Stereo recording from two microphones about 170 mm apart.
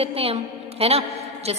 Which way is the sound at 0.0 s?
35° right (ahead or behind).